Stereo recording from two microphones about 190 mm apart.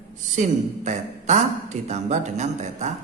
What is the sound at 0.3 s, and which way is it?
Speech, 40° right (ahead or behind).